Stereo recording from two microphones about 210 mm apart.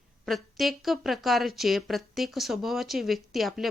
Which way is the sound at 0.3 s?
Centre (ahead or behind).